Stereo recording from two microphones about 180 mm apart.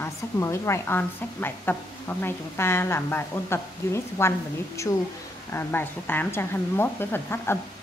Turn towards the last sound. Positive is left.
turn(degrees=10)  # may be behind; listen again after turning